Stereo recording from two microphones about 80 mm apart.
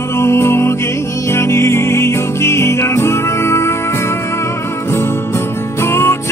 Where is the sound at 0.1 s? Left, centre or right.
Left.